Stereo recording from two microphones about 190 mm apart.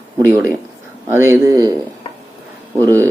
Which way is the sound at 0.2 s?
15° right (ahead or behind).